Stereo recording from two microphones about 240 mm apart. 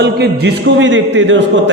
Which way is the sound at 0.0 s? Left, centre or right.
Right.